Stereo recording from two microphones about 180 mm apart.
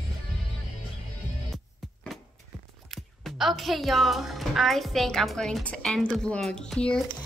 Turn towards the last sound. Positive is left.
turn(degrees=5)  # may be behind; listen again after turning